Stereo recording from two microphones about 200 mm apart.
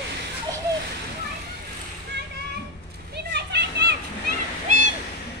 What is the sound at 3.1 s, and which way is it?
Children playing, 55° right (ahead or behind).